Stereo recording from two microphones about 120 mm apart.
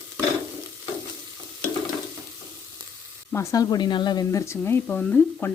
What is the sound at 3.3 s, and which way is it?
Speech, 25° left (ahead or behind).